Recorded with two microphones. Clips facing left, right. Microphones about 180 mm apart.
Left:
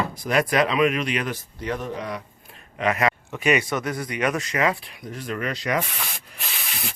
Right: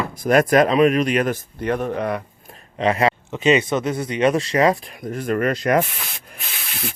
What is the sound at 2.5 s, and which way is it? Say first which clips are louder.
Speech: right 4 dB; 30° right (ahead or behind).